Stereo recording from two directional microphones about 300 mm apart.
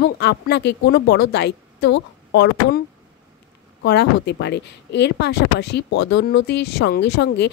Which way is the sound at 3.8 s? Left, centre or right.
Left.